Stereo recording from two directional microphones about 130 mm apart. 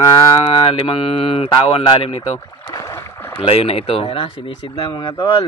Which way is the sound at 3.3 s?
50° left (ahead or behind).